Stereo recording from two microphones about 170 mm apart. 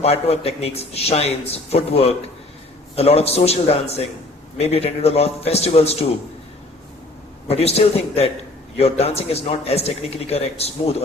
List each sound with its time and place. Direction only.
0.0 s a man's voice: 35° left (ahead or behind)
7.4 s a man's voice: 35° left (ahead or behind)